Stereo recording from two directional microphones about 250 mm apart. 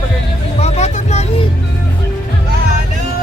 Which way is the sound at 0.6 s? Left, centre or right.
Left.